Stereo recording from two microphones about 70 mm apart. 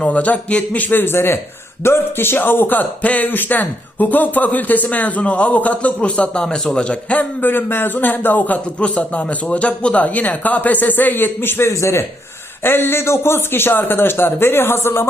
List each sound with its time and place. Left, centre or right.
0.0 s speech: left
11.7 s a man's voice: left
12.6 s a man's voice: left